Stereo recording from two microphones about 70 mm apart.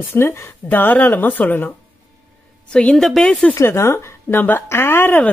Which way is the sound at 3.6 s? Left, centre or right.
Left.